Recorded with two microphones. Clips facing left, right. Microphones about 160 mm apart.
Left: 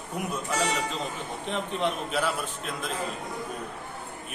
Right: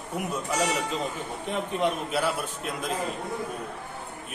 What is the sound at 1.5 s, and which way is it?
Speech, 10° right (ahead or behind).